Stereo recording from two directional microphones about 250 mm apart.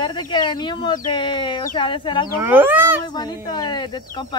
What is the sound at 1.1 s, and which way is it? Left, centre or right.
Speech, centre.